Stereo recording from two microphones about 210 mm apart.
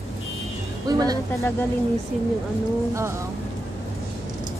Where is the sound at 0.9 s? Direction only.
15° right (ahead or behind).